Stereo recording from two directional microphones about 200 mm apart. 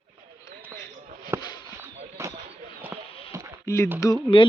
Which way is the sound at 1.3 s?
15° right (ahead or behind).